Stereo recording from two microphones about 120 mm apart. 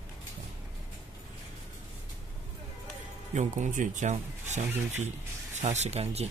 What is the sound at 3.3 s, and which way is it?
Speech, 85° right.